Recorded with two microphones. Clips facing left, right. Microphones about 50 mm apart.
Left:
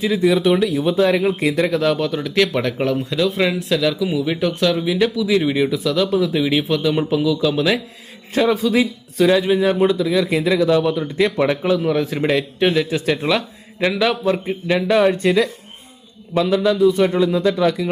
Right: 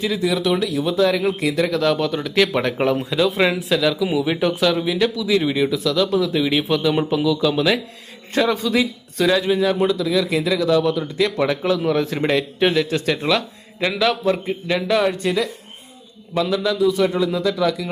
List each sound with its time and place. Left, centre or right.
0.2 s speech: left
1.7 s speech: centre
15.1 s speech: left
16.4 s speech: left